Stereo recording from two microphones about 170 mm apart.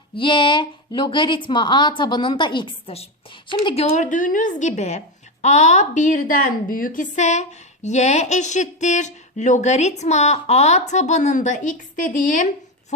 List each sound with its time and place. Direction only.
0.2 s a woman's voice: 30° left (ahead or behind)
3.9 s a woman's voice: 45° left (ahead or behind)